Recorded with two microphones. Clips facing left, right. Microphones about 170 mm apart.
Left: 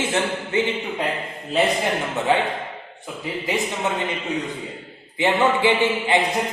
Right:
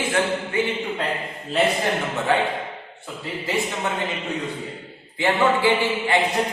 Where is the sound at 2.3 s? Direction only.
15° left (ahead or behind).